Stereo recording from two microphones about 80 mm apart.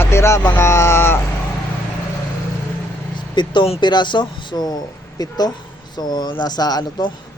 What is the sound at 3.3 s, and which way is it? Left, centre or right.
Speech, left.